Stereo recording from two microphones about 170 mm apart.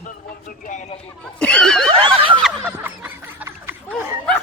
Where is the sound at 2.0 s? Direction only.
30° right (ahead or behind).